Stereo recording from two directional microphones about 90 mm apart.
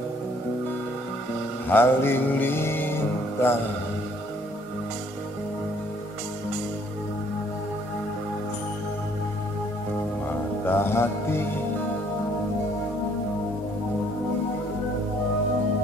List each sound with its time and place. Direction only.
1.7 s music: 25° left (ahead or behind)
10.7 s music: 25° left (ahead or behind)